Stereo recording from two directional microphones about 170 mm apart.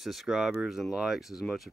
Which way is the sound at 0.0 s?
Centre (ahead or behind).